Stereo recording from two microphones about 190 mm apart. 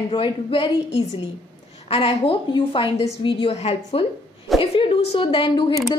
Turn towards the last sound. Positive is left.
turn(degrees=25)  # may be behind; listen again after turning